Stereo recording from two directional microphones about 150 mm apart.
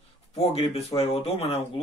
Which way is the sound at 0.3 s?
40° left (ahead or behind).